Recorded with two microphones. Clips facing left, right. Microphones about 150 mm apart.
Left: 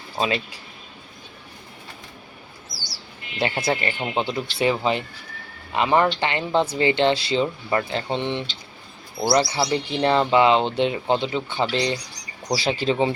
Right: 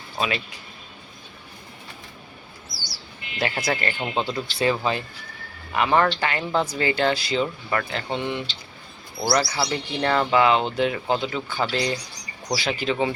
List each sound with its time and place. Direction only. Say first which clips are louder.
0.2 s speech: left 3 dB; 25° left (ahead or behind)
3.3 s speech: left 2 dB; 25° left (ahead or behind)